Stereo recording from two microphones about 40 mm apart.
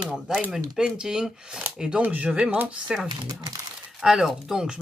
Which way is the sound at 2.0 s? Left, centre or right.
Right.